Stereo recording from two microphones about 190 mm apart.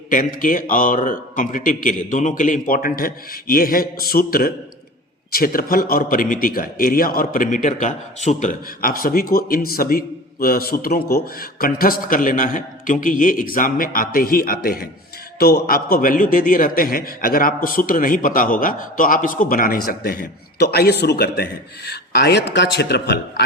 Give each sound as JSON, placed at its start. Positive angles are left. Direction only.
{"t": 0.1, "sound": "a man's voice", "side_deg": 45}